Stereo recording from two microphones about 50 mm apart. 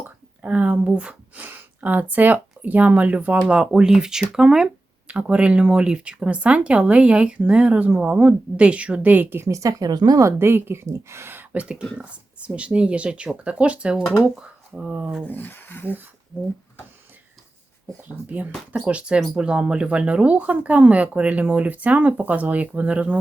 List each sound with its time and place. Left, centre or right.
0.0 s a sound: right
1.5 s speech: right
3.6 s speech: centre
5.1 s speech: right
9.5 s a woman's voice: right
10.4 s a woman's voice: right
10.8 s speech: right
11.5 s speech: right
15.3 s speech: left
16.3 s a woman's voice: right
18.3 s speech: right